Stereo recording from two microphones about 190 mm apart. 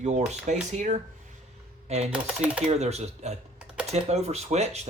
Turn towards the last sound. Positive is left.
turn(degrees=-35)  # may be behind; listen again after turning